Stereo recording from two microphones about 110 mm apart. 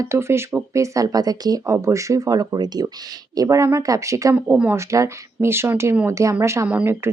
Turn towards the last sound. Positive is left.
turn(degrees=-25)  # may be behind; listen again after turning